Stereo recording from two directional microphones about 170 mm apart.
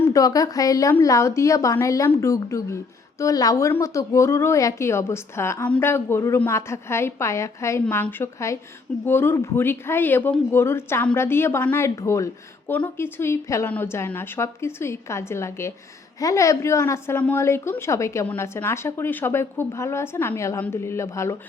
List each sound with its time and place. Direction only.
0.1 s a woman's voice: 20° left (ahead or behind)